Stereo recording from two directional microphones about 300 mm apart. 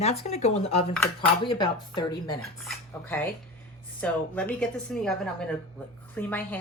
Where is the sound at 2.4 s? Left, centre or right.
Centre.